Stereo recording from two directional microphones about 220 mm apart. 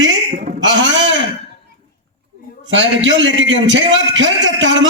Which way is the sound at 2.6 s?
55° right (ahead or behind).